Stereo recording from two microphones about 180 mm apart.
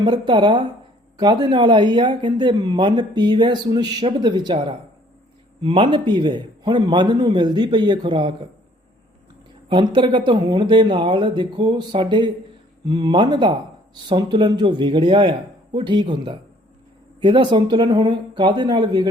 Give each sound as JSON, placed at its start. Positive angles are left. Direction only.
{"t": 0.0, "sound": "speech", "side_deg": -25}
{"t": 9.6, "sound": "speech", "side_deg": -25}